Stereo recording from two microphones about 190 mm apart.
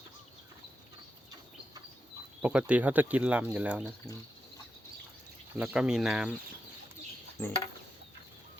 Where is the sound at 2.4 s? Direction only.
5° right (ahead or behind).